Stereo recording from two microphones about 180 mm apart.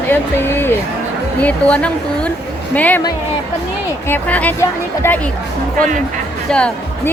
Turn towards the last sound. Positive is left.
turn(degrees=5)  # may be behind; listen again after turning